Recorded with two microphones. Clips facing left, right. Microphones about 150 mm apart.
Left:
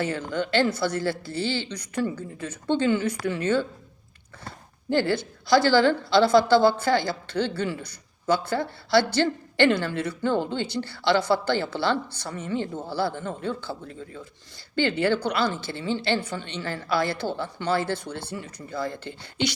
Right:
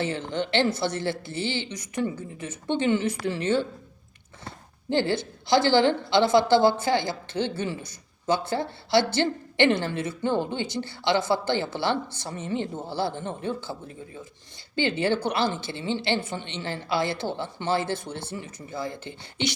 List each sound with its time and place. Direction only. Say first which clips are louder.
0.0 s a woman's voice: left 1 dB; 25° right (ahead or behind)
4.9 s a woman's voice: left 1 dB; 20° right (ahead or behind)